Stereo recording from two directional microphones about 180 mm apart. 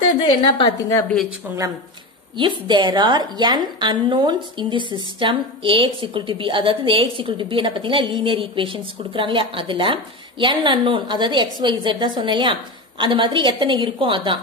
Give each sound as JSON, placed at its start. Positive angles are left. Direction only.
{"t": 0.2, "sound": "a woman's voice", "side_deg": 30}
{"t": 1.4, "sound": "a woman's voice", "side_deg": -10}
{"t": 2.3, "sound": "a woman's voice", "side_deg": -25}